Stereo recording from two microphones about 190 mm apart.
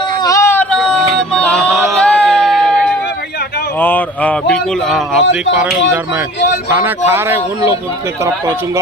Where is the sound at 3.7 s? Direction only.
10° left (ahead or behind).